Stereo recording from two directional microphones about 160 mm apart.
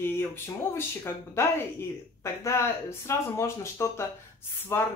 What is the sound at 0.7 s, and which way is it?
Speech, 15° left (ahead or behind).